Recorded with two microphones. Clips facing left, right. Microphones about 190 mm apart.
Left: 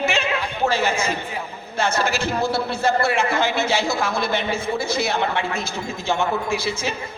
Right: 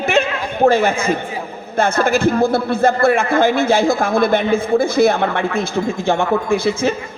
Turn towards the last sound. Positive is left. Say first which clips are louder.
# right 8 dB
turn(degrees=-55)  # may be behind; listen again after turning